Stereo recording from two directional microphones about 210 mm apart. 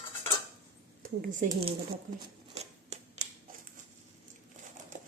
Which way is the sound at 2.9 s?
30° right (ahead or behind).